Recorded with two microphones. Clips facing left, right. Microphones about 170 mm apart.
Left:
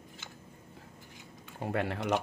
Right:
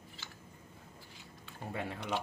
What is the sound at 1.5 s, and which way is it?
Speech, 80° left.